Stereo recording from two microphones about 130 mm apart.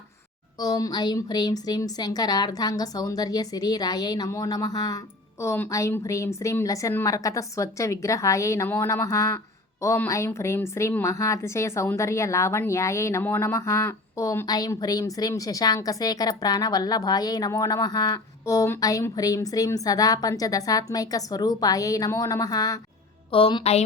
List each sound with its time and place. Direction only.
0.6 s a woman's voice: 30° left (ahead or behind)
23.3 s a woman's voice: 40° left (ahead or behind)